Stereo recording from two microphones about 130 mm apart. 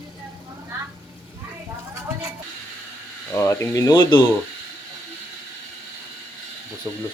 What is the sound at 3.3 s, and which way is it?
Speech, 20° left (ahead or behind).